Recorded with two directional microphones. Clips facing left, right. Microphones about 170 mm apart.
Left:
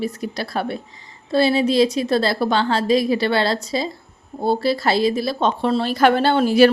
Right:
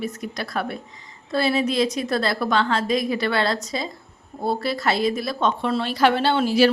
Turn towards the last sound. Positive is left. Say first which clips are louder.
# left 4 dB
turn(degrees=50)  # may be behind; listen again after turning